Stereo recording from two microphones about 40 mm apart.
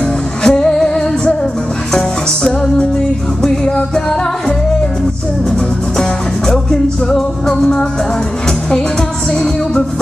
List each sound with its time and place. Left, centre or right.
0.4 s music: centre
5.9 s music: centre